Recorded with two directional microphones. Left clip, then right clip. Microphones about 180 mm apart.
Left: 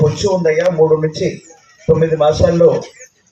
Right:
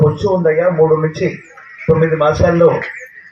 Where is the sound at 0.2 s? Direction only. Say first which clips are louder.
Right 1 dB; 35° right (ahead or behind).